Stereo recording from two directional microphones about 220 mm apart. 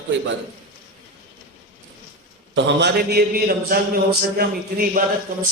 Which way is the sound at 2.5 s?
50° right (ahead or behind).